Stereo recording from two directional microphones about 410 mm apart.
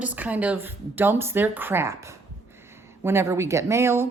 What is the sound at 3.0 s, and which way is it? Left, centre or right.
Speech, centre.